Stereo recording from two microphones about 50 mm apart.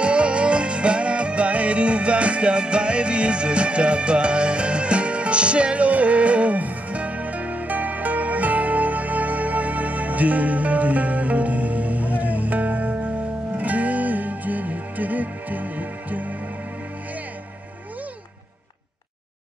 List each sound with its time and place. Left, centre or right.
0.0 s music: right